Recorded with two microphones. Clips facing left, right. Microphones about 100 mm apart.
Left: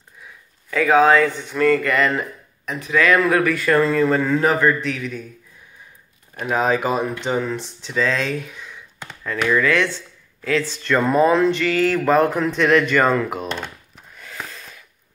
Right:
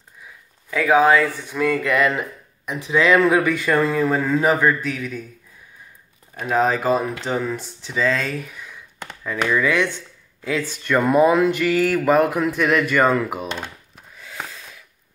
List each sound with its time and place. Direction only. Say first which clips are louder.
0.7 s speech: left 1 dB; 5° right (ahead or behind)
2.8 s speech: right 1 dB; 20° right (ahead or behind)
6.4 s speech: even; 5° left (ahead or behind)
14.1 s snort: even; centre (ahead or behind)